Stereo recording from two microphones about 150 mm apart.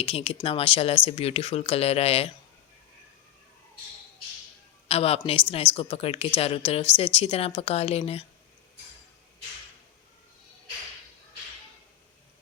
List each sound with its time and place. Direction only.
0.0 s a woman's voice: 40° left (ahead or behind)
4.9 s a woman's voice: 40° left (ahead or behind)